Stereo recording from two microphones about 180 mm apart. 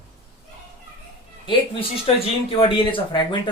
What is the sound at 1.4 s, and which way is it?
Speech, 30° left (ahead or behind).